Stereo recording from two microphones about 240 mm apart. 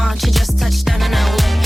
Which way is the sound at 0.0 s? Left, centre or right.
Centre.